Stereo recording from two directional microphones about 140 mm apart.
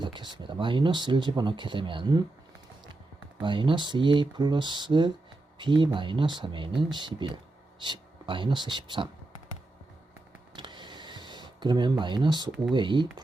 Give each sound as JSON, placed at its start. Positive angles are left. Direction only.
{"t": 0.0, "sound": "speech", "side_deg": -35}
{"t": 3.4, "sound": "speech", "side_deg": -35}
{"t": 10.5, "sound": "a sound", "side_deg": -35}
{"t": 12.7, "sound": "speech", "side_deg": -35}